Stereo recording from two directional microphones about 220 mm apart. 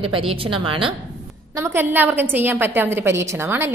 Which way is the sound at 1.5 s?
10° right (ahead or behind).